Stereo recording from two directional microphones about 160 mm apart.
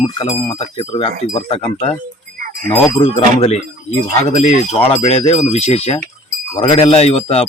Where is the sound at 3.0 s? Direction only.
40° left (ahead or behind).